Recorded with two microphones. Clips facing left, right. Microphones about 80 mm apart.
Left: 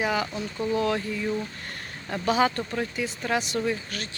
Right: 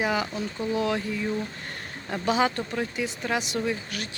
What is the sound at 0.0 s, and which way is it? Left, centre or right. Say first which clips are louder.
Speech: even; centre.